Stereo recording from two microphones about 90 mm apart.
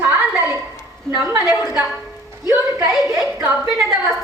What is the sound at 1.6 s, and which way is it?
Speech, 40° left (ahead or behind).